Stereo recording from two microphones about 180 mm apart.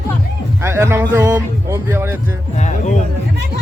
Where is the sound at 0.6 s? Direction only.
15° right (ahead or behind).